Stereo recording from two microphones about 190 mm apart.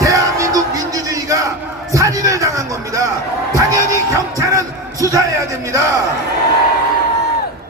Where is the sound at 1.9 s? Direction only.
15° right (ahead or behind).